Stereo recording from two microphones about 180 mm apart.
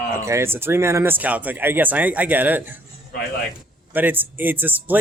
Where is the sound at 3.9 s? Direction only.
10° right (ahead or behind).